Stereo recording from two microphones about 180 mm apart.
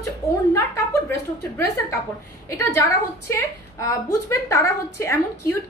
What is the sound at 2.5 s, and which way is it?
Speech, 15° left (ahead or behind).